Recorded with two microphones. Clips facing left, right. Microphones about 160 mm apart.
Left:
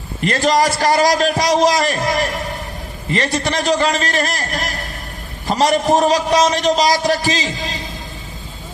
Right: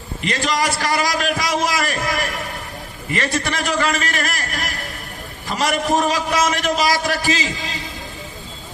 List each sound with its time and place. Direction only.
0.3 s a man's voice: 40° left (ahead or behind)